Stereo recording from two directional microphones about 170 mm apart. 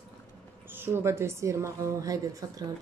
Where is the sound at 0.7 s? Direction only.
15° right (ahead or behind).